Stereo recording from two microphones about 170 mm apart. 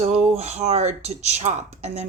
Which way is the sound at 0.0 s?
40° right (ahead or behind).